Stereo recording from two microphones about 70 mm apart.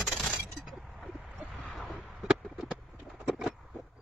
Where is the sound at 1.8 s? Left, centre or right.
Centre.